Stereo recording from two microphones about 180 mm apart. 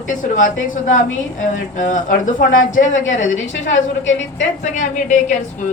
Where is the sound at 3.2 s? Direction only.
90° left.